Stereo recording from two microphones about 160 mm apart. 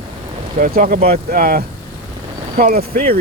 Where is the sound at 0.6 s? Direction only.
65° right (ahead or behind).